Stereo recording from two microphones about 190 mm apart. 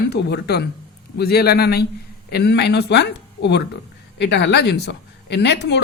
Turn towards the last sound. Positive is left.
turn(degrees=65)  # may be behind; listen again after turning